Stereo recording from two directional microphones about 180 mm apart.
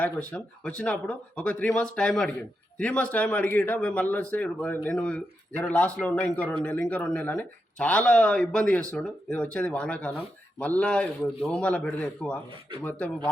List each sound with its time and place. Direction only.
0.0 s a man's voice: 5° left (ahead or behind)